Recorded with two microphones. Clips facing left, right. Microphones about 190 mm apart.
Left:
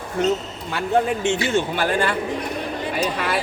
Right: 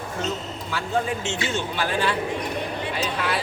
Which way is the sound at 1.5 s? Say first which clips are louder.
Left 5 dB; 50° left (ahead or behind).